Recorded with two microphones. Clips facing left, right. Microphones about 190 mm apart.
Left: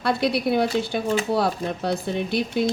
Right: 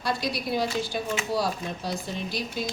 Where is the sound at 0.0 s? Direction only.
60° left (ahead or behind).